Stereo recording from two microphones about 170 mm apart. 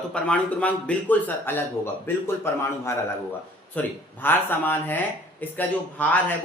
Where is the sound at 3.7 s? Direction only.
10° left (ahead or behind).